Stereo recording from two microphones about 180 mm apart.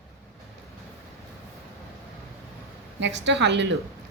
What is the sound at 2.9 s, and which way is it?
Speech, 85° right.